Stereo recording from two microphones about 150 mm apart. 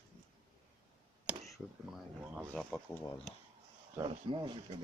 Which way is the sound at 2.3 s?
5° left (ahead or behind).